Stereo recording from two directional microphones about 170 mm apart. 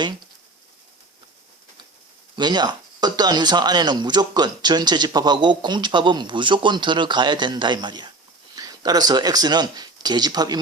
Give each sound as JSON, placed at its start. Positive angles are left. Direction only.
{"t": 2.3, "sound": "speech", "side_deg": -25}